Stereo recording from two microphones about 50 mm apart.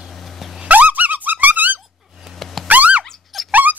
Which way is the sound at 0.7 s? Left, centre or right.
Right.